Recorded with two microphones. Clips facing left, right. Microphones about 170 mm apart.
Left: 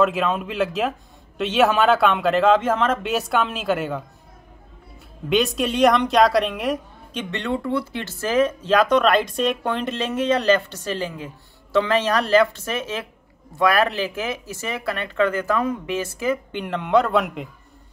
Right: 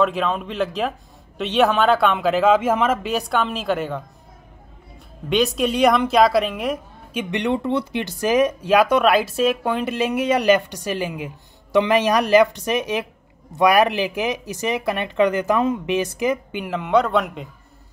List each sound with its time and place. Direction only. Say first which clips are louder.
0.0 s a man's voice: even; centre (ahead or behind)
5.3 s a man's voice: right 1 dB; centre (ahead or behind)
7.2 s speech: right 3 dB; 15° right (ahead or behind)
16.6 s a man's voice: even; 5° right (ahead or behind)